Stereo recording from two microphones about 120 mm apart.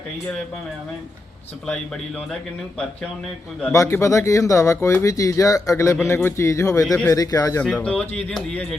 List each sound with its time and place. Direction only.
1.6 s speech: 10° left (ahead or behind)
3.7 s speech: 25° left (ahead or behind)
7.6 s speech: 10° left (ahead or behind)